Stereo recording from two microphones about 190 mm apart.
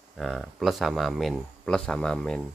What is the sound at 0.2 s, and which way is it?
Speech, centre (ahead or behind).